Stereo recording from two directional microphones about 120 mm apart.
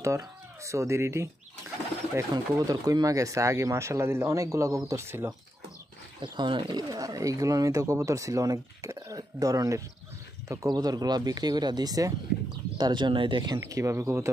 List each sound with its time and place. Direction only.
0.0 s speech: 25° right (ahead or behind)
2.5 s speech: 30° right (ahead or behind)
6.2 s speech: 40° right (ahead or behind)
13.6 s speech: 25° right (ahead or behind)